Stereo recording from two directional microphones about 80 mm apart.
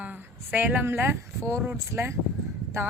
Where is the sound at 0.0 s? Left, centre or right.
Right.